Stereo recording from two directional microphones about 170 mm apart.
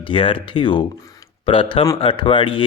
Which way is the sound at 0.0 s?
30° left (ahead or behind).